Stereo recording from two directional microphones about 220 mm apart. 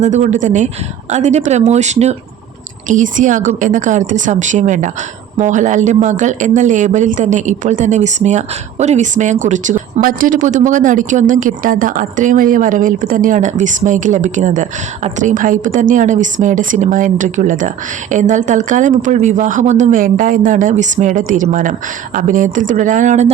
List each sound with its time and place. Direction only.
0.0 s speech: 30° right (ahead or behind)